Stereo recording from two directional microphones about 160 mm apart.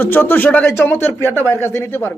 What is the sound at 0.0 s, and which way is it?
Speech, 15° left (ahead or behind).